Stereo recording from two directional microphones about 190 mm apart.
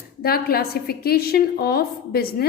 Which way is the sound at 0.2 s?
55° left (ahead or behind).